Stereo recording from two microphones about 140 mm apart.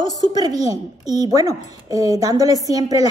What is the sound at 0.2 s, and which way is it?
A woman's voice, 30° right (ahead or behind).